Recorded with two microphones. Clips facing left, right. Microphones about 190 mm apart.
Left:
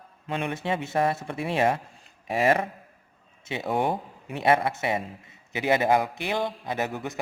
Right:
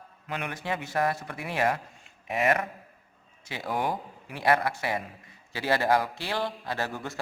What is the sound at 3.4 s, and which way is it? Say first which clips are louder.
A man's voice: left 4 dB; 25° left (ahead or behind).